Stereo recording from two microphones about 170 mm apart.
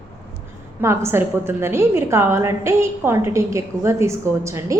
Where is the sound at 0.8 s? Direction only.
15° right (ahead or behind).